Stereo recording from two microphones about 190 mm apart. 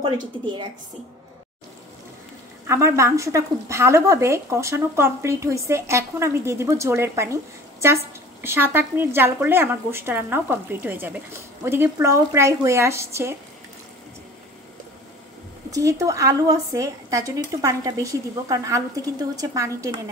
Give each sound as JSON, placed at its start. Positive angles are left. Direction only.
{"t": 2.6, "sound": "a woman's voice", "side_deg": -15}
{"t": 15.7, "sound": "a woman's voice", "side_deg": -15}